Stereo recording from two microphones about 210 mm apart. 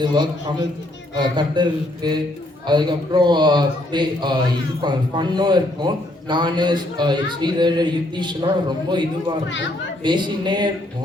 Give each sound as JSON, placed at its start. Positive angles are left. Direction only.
{"t": 0.0, "sound": "a man's voice", "side_deg": -20}
{"t": 10.0, "sound": "a man's voice", "side_deg": -20}